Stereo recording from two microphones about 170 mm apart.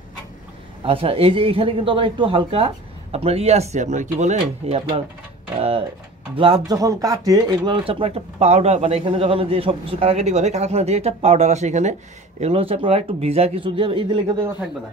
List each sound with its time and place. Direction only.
0.8 s speech: 35° right (ahead or behind)